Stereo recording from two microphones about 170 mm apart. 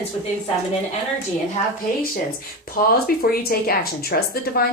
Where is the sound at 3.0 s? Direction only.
60° left (ahead or behind).